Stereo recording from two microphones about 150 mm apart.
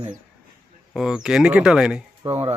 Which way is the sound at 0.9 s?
5° right (ahead or behind).